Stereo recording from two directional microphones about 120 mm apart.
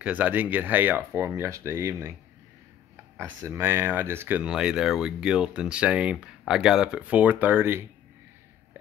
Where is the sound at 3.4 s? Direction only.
20° right (ahead or behind).